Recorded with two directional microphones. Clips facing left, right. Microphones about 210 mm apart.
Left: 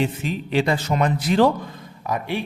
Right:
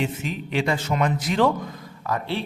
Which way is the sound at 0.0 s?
35° left (ahead or behind).